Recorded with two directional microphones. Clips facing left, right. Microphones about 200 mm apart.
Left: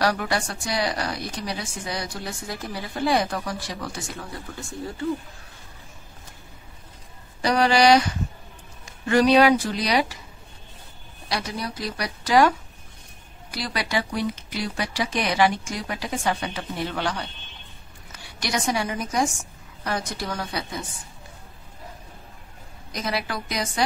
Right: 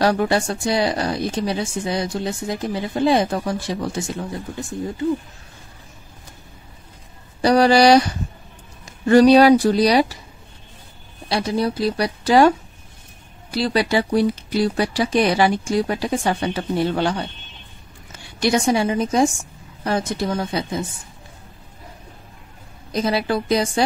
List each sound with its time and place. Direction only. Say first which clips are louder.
0.0 s speech: right 6 dB; 25° right (ahead or behind)
7.4 s speech: right 5 dB; 35° right (ahead or behind)
11.2 s a woman's voice: right 9 dB; 30° right (ahead or behind)
22.8 s speech: right 8 dB; 30° right (ahead or behind)